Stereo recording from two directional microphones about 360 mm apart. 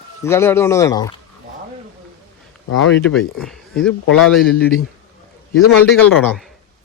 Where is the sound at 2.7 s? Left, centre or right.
Left.